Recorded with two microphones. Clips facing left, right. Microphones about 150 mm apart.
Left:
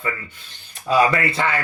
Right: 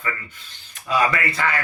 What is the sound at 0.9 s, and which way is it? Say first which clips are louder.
Speech: left 4 dB; 30° left (ahead or behind).